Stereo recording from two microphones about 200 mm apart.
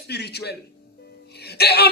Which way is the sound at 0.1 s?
55° left (ahead or behind).